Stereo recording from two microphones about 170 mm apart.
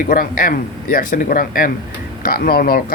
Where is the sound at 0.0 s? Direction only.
55° left (ahead or behind).